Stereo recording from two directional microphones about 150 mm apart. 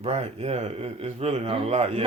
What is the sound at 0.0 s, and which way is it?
Speech, 45° right (ahead or behind).